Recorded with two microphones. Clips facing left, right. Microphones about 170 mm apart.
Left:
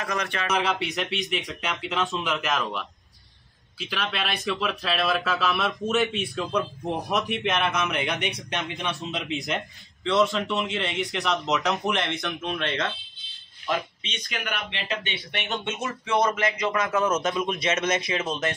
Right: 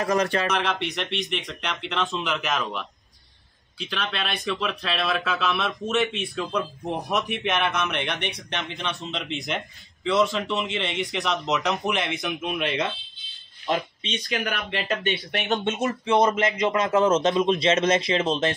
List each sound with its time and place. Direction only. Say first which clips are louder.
0.2 s speech: right 7 dB; 35° right (ahead or behind)
0.5 s speech: even; 5° left (ahead or behind); by 12.9 s 15° right (ahead or behind)
14.3 s speech: right 4 dB; 40° right (ahead or behind)
16.1 s a man's voice: right 3 dB; 25° right (ahead or behind)